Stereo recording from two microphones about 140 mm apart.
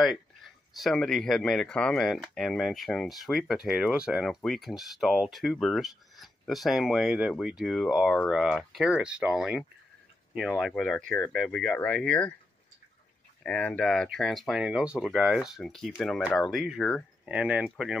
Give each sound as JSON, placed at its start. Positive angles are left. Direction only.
{"t": 0.0, "sound": "speech", "side_deg": 0}
{"t": 10.7, "sound": "speech", "side_deg": 5}
{"t": 13.4, "sound": "speech", "side_deg": 10}